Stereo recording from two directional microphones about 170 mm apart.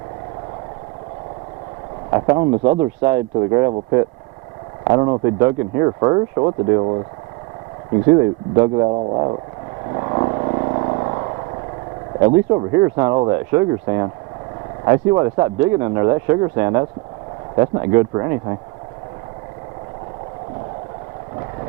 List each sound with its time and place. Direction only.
2.0 s speech: 25° right (ahead or behind)
3.1 s speech: 15° right (ahead or behind)
4.8 s speech: 30° right (ahead or behind)
8.0 s speech: 25° right (ahead or behind)
9.9 s vehicle: 30° right (ahead or behind)
12.2 s speech: 25° right (ahead or behind)